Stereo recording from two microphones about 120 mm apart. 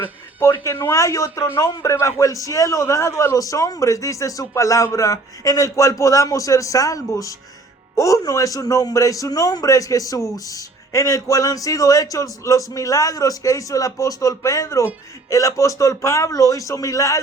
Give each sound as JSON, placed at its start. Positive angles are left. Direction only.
{"t": 0.0, "sound": "a man's voice", "side_deg": 20}